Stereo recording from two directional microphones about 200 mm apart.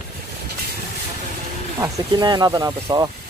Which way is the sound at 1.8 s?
20° right (ahead or behind).